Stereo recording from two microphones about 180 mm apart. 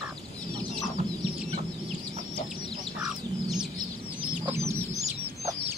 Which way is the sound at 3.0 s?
5° right (ahead or behind).